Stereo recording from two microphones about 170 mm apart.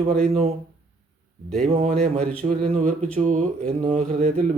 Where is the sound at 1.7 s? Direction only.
40° right (ahead or behind).